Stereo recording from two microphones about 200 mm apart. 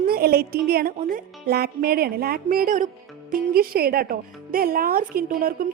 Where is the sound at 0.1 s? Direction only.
50° right (ahead or behind).